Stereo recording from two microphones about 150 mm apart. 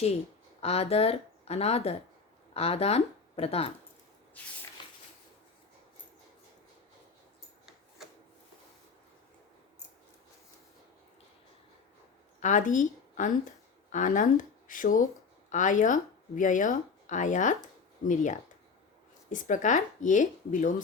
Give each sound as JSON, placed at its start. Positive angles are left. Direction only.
{"t": 0.6, "sound": "speech", "side_deg": 45}
{"t": 4.4, "sound": "spray", "side_deg": 10}
{"t": 4.8, "sound": "a sound", "side_deg": 30}
{"t": 12.4, "sound": "a woman's voice", "side_deg": 55}